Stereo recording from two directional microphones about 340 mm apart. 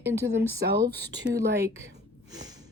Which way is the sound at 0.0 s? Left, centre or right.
Centre.